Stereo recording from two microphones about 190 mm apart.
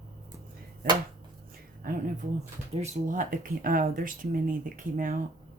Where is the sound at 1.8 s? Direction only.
50° right (ahead or behind).